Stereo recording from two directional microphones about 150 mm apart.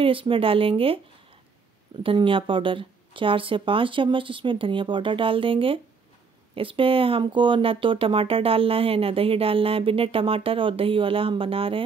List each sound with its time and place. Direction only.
0.0 s speech: 35° right (ahead or behind)
2.0 s speech: 35° right (ahead or behind)